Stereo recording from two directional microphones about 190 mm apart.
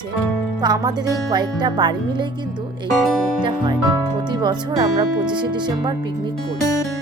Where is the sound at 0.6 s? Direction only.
20° right (ahead or behind).